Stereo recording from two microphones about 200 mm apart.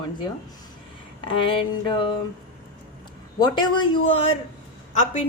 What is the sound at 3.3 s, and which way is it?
Speech, 20° left (ahead or behind).